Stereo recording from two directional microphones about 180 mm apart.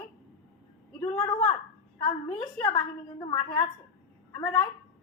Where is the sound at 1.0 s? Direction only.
20° left (ahead or behind).